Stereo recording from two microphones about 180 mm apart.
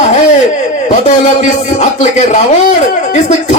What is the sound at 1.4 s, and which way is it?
Speech, 40° left (ahead or behind).